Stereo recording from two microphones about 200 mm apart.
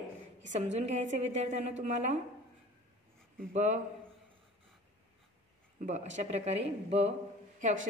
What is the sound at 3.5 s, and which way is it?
Speech, 35° right (ahead or behind).